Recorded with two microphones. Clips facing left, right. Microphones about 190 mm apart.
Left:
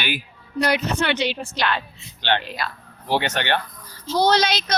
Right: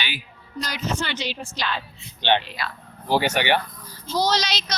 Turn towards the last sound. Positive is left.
turn(degrees=55)  # may be behind; listen again after turning